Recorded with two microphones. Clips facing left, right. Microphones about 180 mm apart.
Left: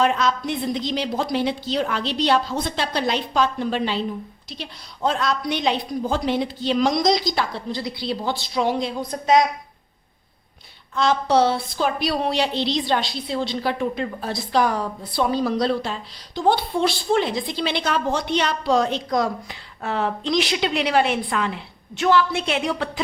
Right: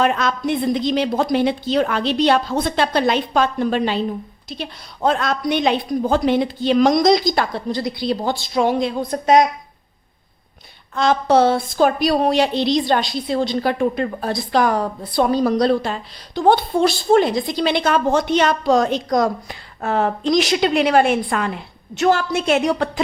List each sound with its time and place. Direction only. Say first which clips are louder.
0.0 s a woman's voice: right 2 dB; 55° right (ahead or behind)
10.9 s a woman's voice: right 3 dB; 50° right (ahead or behind)